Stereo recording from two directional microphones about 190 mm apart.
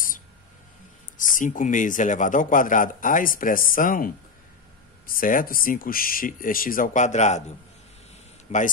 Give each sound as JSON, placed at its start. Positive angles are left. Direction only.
{"t": 1.1, "sound": "a man's voice", "side_deg": 45}
{"t": 8.5, "sound": "speech", "side_deg": 35}